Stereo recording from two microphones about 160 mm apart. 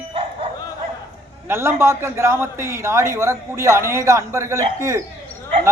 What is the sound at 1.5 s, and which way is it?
A man's voice, 15° right (ahead or behind).